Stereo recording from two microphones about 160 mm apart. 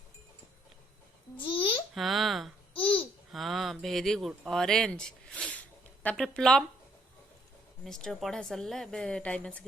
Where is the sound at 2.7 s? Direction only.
35° left (ahead or behind).